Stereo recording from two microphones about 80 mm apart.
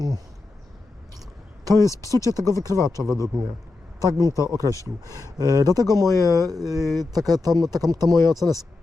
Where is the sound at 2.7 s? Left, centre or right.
Left.